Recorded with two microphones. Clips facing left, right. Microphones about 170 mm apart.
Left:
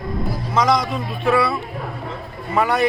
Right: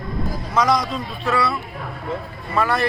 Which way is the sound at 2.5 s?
15° left (ahead or behind).